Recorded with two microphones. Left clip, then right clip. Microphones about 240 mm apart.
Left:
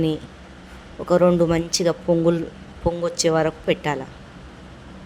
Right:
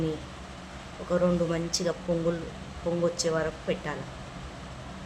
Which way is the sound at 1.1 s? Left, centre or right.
Left.